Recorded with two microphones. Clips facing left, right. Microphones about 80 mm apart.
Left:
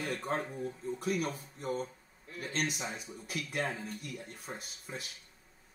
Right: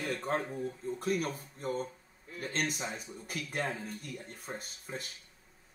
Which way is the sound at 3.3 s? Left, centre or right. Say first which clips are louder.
Even; right.